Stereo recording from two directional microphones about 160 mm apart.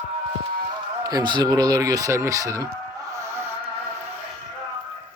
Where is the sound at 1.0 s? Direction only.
25° right (ahead or behind).